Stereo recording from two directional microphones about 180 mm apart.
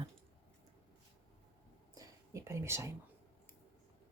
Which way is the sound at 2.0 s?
15° right (ahead or behind).